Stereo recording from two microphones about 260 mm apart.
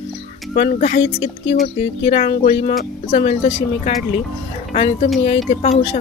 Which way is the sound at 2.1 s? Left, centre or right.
Left.